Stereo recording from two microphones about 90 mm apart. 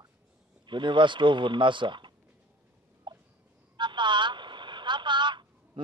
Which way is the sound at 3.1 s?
60° right (ahead or behind).